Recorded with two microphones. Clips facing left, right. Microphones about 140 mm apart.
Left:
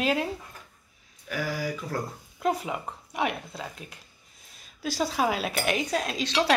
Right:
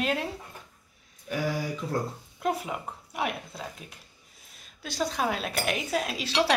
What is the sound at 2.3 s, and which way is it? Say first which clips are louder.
A woman's voice: left 2 dB; centre (ahead or behind).